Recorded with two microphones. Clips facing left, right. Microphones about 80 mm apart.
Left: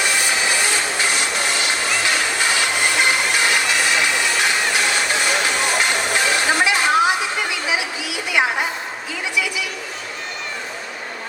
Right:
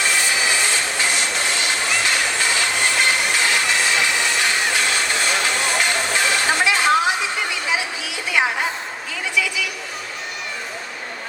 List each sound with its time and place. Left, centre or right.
0.0 s music: centre